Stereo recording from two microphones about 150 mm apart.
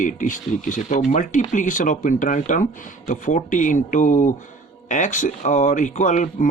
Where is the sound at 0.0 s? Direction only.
60° left (ahead or behind).